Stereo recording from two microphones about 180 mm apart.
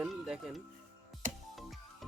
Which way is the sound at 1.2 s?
45° right (ahead or behind).